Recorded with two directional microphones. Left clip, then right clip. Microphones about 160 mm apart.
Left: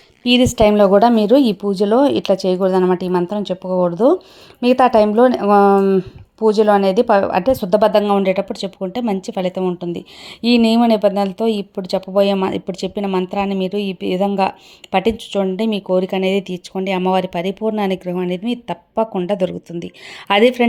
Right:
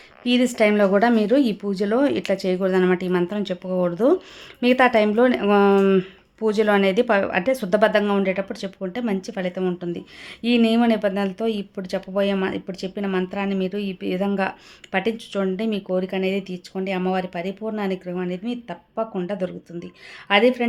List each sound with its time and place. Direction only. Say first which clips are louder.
0.3 s speech: left 6 dB; 25° left (ahead or behind)
2.6 s speech: left 5 dB; 5° right (ahead or behind)
2.8 s speech: left 4 dB; 15° left (ahead or behind)
4.6 s speech: left 5 dB; 15° left (ahead or behind)
5.4 s speech: left 6 dB; 5° right (ahead or behind)
6.4 s speech: left 6 dB; 15° left (ahead or behind); by 20.7 s 45° left (ahead or behind)